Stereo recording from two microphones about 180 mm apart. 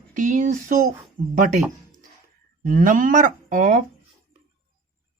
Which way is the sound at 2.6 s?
45° right (ahead or behind).